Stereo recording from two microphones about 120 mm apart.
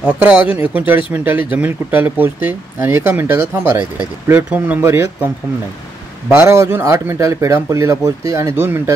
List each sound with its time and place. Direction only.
0.0 s speech: 10° right (ahead or behind)
6.2 s speech: 20° right (ahead or behind)